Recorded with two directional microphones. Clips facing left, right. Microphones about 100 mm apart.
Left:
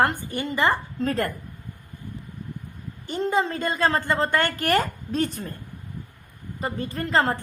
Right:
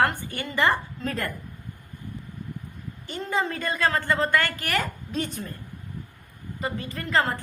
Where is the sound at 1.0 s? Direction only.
40° left (ahead or behind).